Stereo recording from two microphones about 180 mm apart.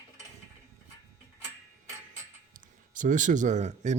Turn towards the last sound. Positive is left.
turn(degrees=-40)  # may be behind; listen again after turning